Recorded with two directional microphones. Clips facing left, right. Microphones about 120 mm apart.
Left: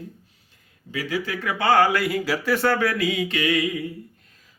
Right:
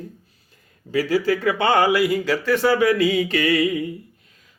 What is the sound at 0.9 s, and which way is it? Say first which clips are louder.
Speech: right 8 dB; 35° right (ahead or behind).